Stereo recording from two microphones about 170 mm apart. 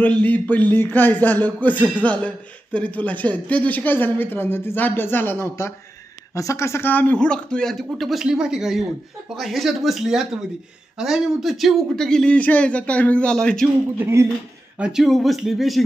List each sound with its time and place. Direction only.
0.0 s speech: 10° left (ahead or behind)
13.9 s speech: 15° right (ahead or behind)
14.8 s speech: 5° right (ahead or behind)